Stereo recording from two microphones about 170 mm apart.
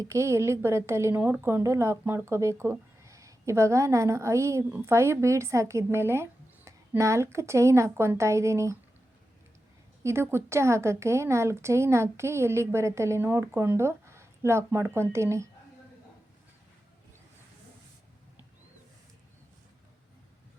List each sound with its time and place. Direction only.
0.0 s a woman's voice: 15° right (ahead or behind)
10.0 s a woman's voice: 15° right (ahead or behind)